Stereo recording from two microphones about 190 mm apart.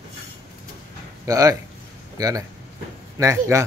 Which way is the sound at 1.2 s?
15° right (ahead or behind).